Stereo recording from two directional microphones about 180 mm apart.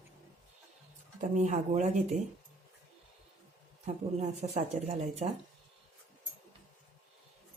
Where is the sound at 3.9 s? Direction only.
40° right (ahead or behind).